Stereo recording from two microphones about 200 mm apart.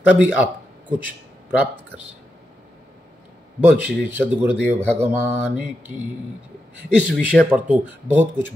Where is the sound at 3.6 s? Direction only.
5° right (ahead or behind).